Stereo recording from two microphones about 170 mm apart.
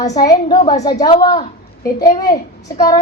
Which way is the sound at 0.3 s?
25° left (ahead or behind).